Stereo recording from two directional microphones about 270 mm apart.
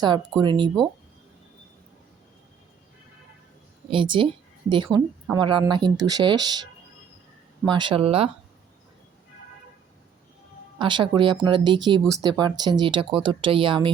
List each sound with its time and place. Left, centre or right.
0.0 s speech: centre
3.8 s speech: centre
7.6 s speech: centre
10.8 s speech: centre